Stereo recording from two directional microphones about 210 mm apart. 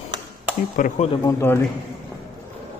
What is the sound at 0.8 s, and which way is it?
Speech, 40° left (ahead or behind).